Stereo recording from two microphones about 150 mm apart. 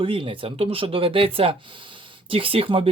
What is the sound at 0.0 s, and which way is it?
Speech, 35° right (ahead or behind).